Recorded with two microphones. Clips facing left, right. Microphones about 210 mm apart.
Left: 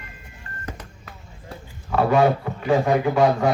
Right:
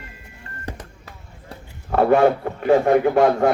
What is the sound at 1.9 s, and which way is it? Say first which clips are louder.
Speech: right 3 dB; 55° right (ahead or behind).